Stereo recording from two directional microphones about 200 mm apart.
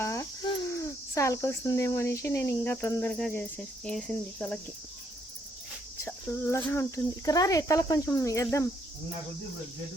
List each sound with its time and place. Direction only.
0.0 s speech: 15° left (ahead or behind)
6.1 s speech: 10° left (ahead or behind)